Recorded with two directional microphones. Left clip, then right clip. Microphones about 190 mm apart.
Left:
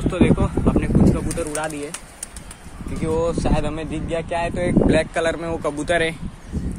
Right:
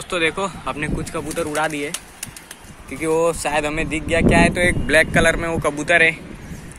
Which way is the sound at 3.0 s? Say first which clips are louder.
Right 3 dB; 20° right (ahead or behind).